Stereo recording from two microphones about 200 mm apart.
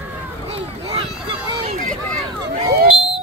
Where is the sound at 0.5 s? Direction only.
30° right (ahead or behind).